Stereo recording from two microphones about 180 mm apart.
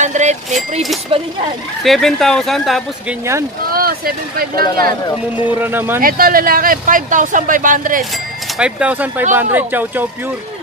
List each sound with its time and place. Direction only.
0.0 s speech: 40° right (ahead or behind)
1.8 s speech: centre (ahead or behind)
3.7 s speech: 55° right (ahead or behind)
5.4 s speech: 10° right (ahead or behind)
5.9 s speech: 55° right (ahead or behind)
8.5 s speech: 5° right (ahead or behind)